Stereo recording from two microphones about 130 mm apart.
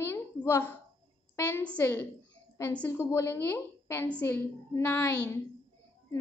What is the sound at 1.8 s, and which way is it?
A woman's voice, 15° left (ahead or behind).